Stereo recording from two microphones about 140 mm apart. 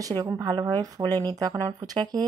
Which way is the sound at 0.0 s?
25° right (ahead or behind).